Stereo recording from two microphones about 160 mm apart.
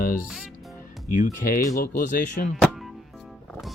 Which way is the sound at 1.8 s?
55° left (ahead or behind).